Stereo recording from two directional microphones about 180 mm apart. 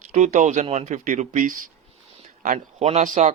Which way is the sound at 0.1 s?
40° right (ahead or behind).